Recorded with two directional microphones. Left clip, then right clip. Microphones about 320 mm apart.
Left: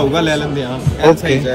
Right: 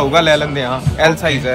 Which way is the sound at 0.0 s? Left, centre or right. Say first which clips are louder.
Right 3 dB; right.